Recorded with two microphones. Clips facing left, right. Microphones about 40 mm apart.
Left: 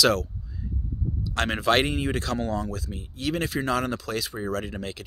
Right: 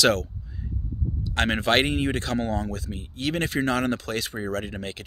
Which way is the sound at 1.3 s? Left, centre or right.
Right.